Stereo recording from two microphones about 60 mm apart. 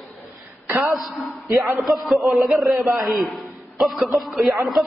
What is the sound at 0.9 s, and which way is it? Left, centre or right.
Speech, centre.